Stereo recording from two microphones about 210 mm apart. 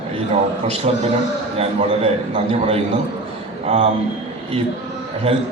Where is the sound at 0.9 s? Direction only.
30° right (ahead or behind).